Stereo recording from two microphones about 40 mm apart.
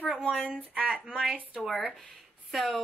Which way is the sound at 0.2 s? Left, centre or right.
Centre.